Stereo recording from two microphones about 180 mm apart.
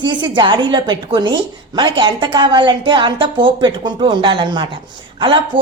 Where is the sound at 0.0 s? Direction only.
25° right (ahead or behind).